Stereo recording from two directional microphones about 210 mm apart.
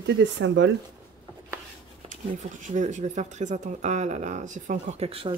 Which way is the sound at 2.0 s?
40° right (ahead or behind).